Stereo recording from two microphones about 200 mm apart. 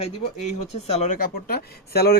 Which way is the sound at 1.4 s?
50° left (ahead or behind).